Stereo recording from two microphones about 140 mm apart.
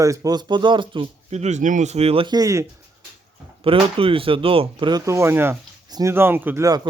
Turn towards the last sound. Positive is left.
turn(degrees=-15)  # may be behind; listen again after turning